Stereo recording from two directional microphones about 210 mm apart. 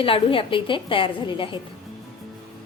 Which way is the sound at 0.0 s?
25° left (ahead or behind).